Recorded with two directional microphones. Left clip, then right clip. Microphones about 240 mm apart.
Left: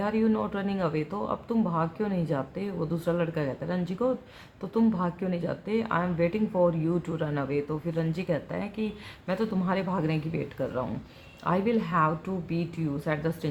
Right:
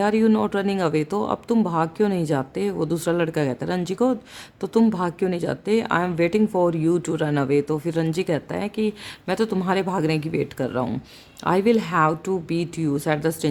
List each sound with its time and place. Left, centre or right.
0.0 s speech: right